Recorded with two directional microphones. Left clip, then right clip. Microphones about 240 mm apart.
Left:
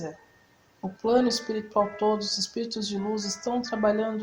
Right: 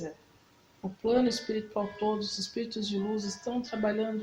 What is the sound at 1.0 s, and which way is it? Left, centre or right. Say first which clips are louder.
Speech: left 4 dB; left.